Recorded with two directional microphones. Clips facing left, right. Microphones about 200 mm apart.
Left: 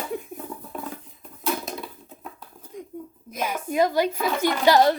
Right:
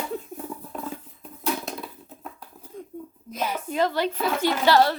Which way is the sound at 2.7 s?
15° left (ahead or behind).